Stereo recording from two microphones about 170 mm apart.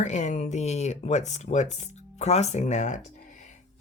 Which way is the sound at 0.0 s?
45° left (ahead or behind).